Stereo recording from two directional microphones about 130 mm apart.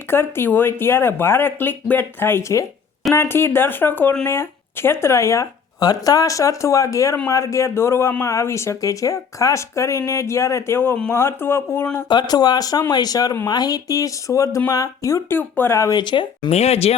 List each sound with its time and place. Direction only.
0.1 s speech: 15° left (ahead or behind)
12.0 s speech: 35° left (ahead or behind)
16.0 s speech: 35° left (ahead or behind)
16.5 s speech: 55° left (ahead or behind)